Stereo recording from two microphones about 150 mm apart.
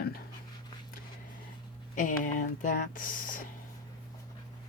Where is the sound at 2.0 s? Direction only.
60° left (ahead or behind).